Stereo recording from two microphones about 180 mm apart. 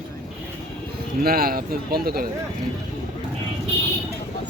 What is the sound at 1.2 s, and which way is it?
Speech, 55° right (ahead or behind).